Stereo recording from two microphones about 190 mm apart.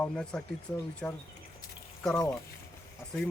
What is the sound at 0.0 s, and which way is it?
Speech, 5° left (ahead or behind).